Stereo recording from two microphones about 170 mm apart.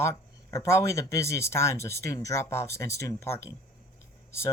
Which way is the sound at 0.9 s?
15° left (ahead or behind).